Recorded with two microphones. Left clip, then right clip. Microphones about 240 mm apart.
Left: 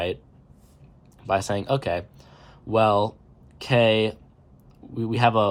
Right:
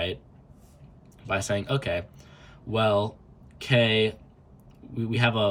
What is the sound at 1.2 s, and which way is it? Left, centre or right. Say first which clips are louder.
Speech: left 4 dB; centre.